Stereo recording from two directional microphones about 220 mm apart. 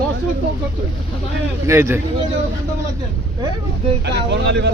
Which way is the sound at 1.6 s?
10° right (ahead or behind).